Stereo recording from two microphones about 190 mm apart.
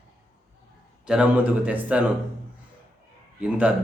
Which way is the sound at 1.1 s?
5° right (ahead or behind).